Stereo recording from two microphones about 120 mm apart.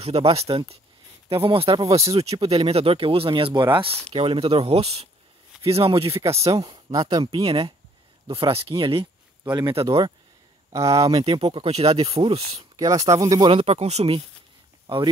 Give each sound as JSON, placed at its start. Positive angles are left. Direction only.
{"t": 0.0, "sound": "speech", "side_deg": -55}
{"t": 6.4, "sound": "speech", "side_deg": -35}
{"t": 7.4, "sound": "speech", "side_deg": -50}
{"t": 10.7, "sound": "speech", "side_deg": -30}
{"t": 11.1, "sound": "speech", "side_deg": -50}
{"t": 12.5, "sound": "speech", "side_deg": -30}
{"t": 13.5, "sound": "speech", "side_deg": -55}